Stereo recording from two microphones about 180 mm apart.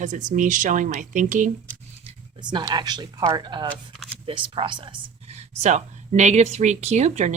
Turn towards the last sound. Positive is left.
turn(degrees=-40)  # may be behind; listen again after turning